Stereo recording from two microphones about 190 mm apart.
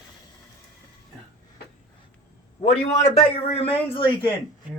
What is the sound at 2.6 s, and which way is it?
A man's voice, 35° left (ahead or behind).